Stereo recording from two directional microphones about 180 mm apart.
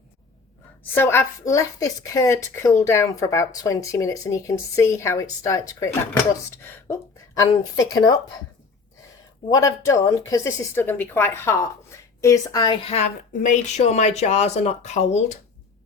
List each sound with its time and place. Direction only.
0.9 s a woman's voice: 15° left (ahead or behind)
6.7 s a sound: 15° left (ahead or behind)
9.5 s a woman's voice: 20° left (ahead or behind)
12.8 s speech: 35° left (ahead or behind)